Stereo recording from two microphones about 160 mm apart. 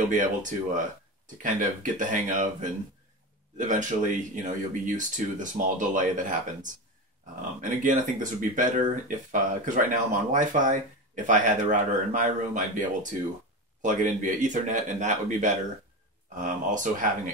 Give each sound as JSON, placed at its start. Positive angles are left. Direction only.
{"t": 0.1, "sound": "speech", "side_deg": -55}
{"t": 7.8, "sound": "speech", "side_deg": -55}